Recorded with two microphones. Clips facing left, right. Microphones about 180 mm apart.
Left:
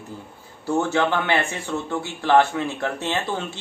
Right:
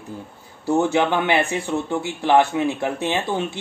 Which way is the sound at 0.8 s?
20° right (ahead or behind).